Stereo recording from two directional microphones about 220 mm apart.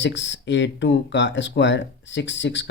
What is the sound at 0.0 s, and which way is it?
Speech, 55° left (ahead or behind).